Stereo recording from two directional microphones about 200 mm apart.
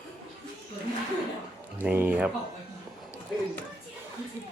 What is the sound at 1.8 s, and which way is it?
Speech, 10° right (ahead or behind).